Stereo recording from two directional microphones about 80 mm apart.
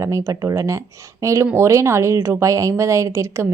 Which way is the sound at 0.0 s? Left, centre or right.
Right.